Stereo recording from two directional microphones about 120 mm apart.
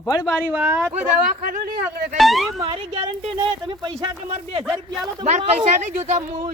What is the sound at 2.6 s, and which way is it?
Speech, 55° right (ahead or behind).